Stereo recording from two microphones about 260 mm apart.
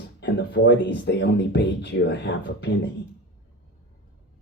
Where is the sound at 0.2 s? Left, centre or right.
Left.